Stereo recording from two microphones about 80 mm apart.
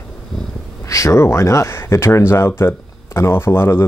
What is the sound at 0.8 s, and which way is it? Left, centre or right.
Speech, left.